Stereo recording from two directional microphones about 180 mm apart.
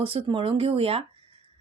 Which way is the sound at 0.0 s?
30° right (ahead or behind).